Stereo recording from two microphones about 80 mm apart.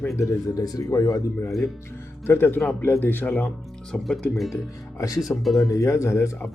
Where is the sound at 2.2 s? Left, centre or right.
Left.